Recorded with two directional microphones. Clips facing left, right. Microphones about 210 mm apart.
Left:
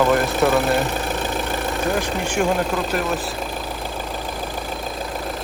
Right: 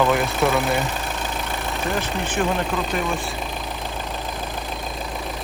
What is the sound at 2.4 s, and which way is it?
Speech, 5° left (ahead or behind).